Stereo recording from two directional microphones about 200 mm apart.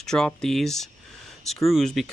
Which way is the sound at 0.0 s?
5° left (ahead or behind).